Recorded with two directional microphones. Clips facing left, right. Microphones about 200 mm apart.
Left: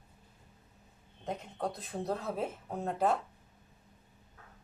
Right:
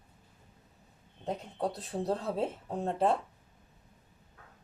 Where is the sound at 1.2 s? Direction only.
30° right (ahead or behind).